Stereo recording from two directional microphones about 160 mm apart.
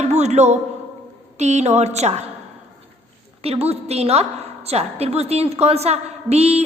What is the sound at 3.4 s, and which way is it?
A woman's voice, 40° right (ahead or behind).